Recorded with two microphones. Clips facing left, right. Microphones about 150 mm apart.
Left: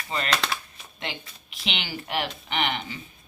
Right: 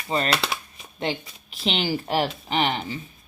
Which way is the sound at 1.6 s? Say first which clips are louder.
Right 8 dB; 35° right (ahead or behind).